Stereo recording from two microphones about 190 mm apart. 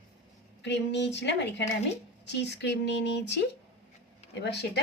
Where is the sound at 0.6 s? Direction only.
65° left (ahead or behind).